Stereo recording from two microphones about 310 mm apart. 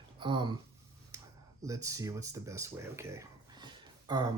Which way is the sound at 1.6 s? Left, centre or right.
Centre.